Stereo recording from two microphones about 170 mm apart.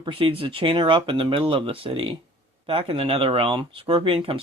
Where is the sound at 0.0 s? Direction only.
30° right (ahead or behind).